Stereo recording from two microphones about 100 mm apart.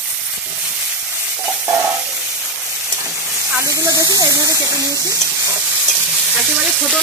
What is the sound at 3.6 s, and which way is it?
Spray, 35° right (ahead or behind).